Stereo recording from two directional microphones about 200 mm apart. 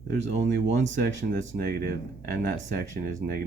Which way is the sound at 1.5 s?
55° right (ahead or behind).